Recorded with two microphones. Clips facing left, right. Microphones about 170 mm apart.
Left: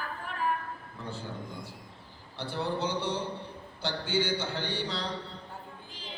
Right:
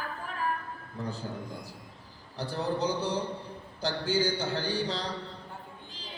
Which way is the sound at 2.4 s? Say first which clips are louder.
Right 2 dB; 40° right (ahead or behind).